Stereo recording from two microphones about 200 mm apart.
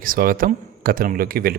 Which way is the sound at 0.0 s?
45° right (ahead or behind).